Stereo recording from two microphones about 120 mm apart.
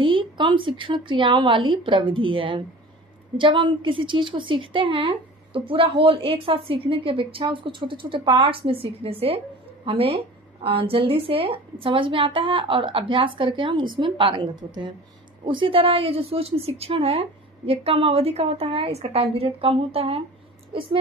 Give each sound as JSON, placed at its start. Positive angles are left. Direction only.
{"t": 0.0, "sound": "a woman's voice", "side_deg": -45}